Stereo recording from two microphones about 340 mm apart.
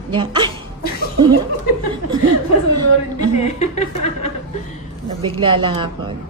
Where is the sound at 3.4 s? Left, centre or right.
Centre.